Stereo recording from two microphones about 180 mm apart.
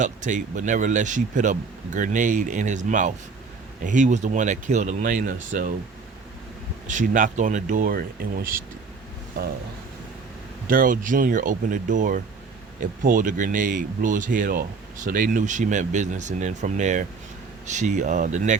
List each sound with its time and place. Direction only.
0.0 s speech: 45° right (ahead or behind)
6.8 s speech: 45° right (ahead or behind)
10.7 s speech: 50° right (ahead or behind)